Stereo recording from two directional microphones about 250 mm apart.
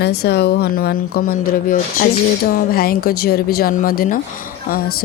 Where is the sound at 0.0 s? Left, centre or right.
Left.